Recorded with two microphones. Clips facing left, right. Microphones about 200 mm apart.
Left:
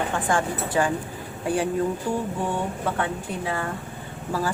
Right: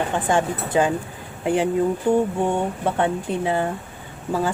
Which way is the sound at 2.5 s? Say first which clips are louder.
Right 4 dB; 25° right (ahead or behind).